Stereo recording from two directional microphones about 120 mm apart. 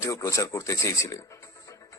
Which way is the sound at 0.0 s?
25° left (ahead or behind).